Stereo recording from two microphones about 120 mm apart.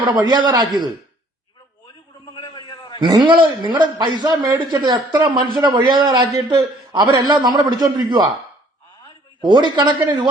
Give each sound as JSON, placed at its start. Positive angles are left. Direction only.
{"t": 0.2, "sound": "a man's voice", "side_deg": -40}
{"t": 2.3, "sound": "a sound", "side_deg": 40}
{"t": 3.0, "sound": "a man's voice", "side_deg": -35}
{"t": 9.4, "sound": "a man's voice", "side_deg": -40}